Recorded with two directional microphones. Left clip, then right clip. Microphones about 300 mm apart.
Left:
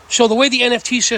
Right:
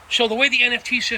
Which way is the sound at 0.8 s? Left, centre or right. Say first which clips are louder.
Left 4 dB; centre.